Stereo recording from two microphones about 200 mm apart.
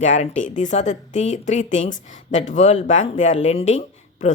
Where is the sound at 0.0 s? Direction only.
35° left (ahead or behind).